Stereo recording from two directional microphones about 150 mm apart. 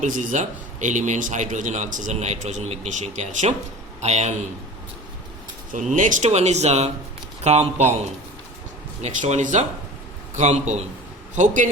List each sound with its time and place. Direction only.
0.0 s a man's voice: 60° right (ahead or behind)
5.7 s a man's voice: 55° right (ahead or behind)
9.0 s a man's voice: 50° right (ahead or behind)